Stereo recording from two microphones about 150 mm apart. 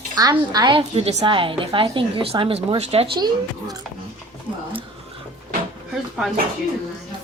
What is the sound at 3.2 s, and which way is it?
Speech, 25° right (ahead or behind).